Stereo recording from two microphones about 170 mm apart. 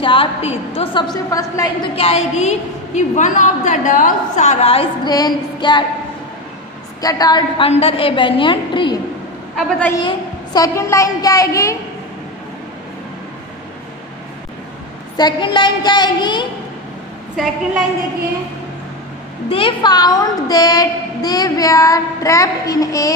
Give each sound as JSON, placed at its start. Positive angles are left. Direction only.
{"t": 0.0, "sound": "a woman's voice", "side_deg": 30}
{"t": 2.0, "sound": "a woman's voice", "side_deg": 40}
{"t": 5.0, "sound": "a woman's voice", "side_deg": 25}
{"t": 7.0, "sound": "a woman's voice", "side_deg": 20}
{"t": 9.6, "sound": "a woman's voice", "side_deg": 5}
{"t": 10.0, "sound": "a woman's voice", "side_deg": 20}
{"t": 15.1, "sound": "a woman's voice", "side_deg": 25}
{"t": 19.5, "sound": "a woman's voice", "side_deg": 30}